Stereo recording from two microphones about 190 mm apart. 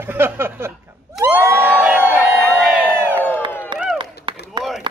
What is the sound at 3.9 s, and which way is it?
Clapping, 25° right (ahead or behind).